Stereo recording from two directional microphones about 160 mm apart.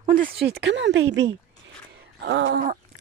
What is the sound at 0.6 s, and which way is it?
Speech, 90° right.